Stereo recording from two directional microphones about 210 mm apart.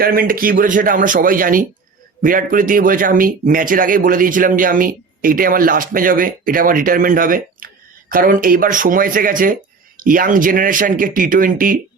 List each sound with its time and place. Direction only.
0.0 s speech: 45° right (ahead or behind)